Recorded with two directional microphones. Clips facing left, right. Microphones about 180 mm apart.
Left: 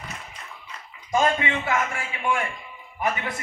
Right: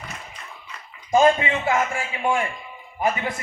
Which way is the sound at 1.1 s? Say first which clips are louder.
Right 5 dB; 30° right (ahead or behind).